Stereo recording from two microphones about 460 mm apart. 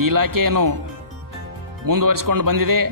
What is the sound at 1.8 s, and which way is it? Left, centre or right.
Speech, right.